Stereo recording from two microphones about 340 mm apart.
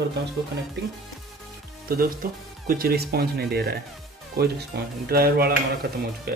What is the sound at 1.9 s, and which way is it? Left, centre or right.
Speech, right.